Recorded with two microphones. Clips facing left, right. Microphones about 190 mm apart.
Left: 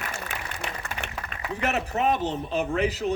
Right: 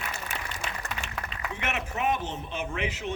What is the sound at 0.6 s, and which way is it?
Applause, 60° left (ahead or behind).